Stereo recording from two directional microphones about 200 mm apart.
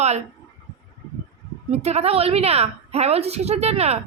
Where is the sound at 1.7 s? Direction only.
30° right (ahead or behind).